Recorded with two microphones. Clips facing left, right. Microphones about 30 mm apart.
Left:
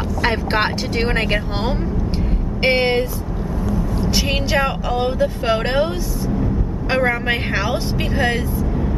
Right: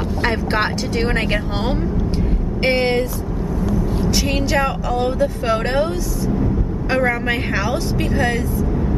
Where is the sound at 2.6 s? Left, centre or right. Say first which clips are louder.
Left 1 dB; centre.